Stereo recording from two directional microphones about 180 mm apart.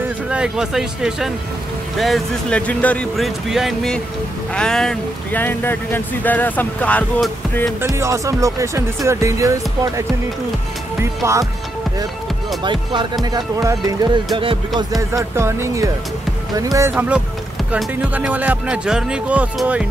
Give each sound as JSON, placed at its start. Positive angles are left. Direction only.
{"t": 0.3, "sound": "speech", "side_deg": -5}
{"t": 7.8, "sound": "speech", "side_deg": -15}
{"t": 11.2, "sound": "speech", "side_deg": -15}
{"t": 13.2, "sound": "speech", "side_deg": -20}
{"t": 17.6, "sound": "speech", "side_deg": -10}